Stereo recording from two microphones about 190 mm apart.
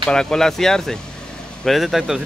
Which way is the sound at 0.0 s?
5° left (ahead or behind).